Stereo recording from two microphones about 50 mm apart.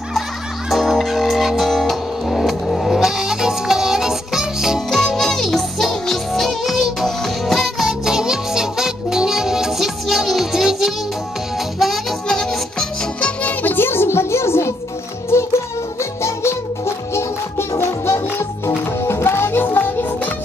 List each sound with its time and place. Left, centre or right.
0.7 s music: centre
4.9 s music: centre
12.3 s music: centre
13.2 s music: left